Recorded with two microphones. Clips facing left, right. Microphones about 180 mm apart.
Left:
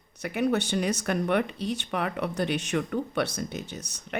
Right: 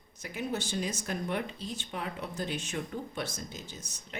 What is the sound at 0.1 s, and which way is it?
Speech, 65° left (ahead or behind).